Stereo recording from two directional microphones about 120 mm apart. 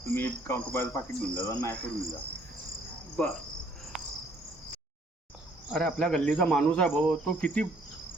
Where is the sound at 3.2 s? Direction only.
5° left (ahead or behind).